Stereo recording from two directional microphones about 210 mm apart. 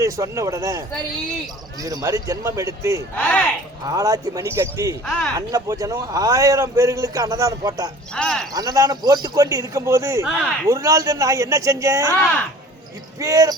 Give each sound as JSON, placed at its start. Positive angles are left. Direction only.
{"t": 0.0, "sound": "a man's voice", "side_deg": -15}
{"t": 1.8, "sound": "a man's voice", "side_deg": -15}
{"t": 3.2, "sound": "speech", "side_deg": 5}
{"t": 3.8, "sound": "a man's voice", "side_deg": -15}
{"t": 5.0, "sound": "speech", "side_deg": 5}
{"t": 5.5, "sound": "a man's voice", "side_deg": -15}
{"t": 8.1, "sound": "speech", "side_deg": 5}
{"t": 8.5, "sound": "a man's voice", "side_deg": -15}
{"t": 13.1, "sound": "a man's voice", "side_deg": -15}